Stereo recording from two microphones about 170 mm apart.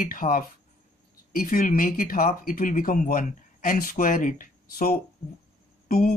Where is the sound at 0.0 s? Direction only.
55° left (ahead or behind).